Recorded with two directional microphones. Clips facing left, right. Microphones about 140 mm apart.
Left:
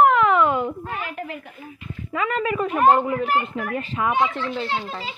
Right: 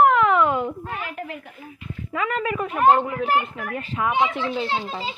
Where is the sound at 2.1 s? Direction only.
25° left (ahead or behind).